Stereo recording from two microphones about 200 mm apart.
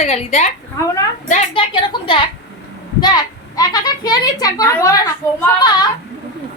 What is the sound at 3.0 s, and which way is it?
A child's voice, 20° left (ahead or behind).